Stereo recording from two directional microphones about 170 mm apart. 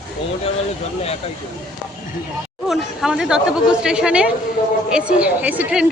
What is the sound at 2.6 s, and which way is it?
A woman's voice, centre (ahead or behind).